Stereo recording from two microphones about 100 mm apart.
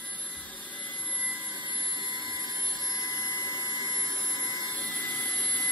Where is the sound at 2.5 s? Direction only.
45° left (ahead or behind).